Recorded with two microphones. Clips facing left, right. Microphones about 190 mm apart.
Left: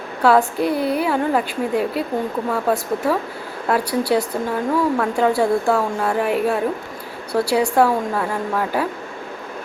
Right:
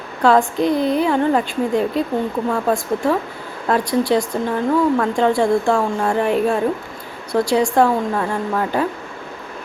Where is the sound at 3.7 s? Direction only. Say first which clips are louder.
Right 2 dB; 10° left (ahead or behind).